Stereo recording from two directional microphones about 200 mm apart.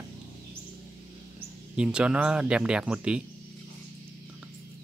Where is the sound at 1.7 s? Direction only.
5° right (ahead or behind).